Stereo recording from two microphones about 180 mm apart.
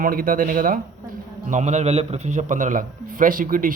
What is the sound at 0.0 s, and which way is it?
A man's voice, 50° right (ahead or behind).